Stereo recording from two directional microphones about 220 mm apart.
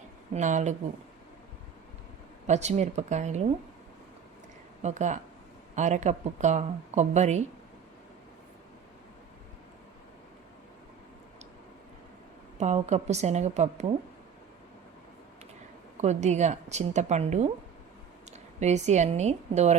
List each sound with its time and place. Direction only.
0.3 s speech: 35° right (ahead or behind)
2.5 s speech: 30° right (ahead or behind)
4.8 s speech: 30° right (ahead or behind)
12.5 s speech: 30° right (ahead or behind)
16.0 s speech: 30° right (ahead or behind)
18.6 s speech: 30° right (ahead or behind)